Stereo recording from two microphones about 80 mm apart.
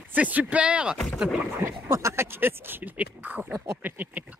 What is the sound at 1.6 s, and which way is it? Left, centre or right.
Speech, right.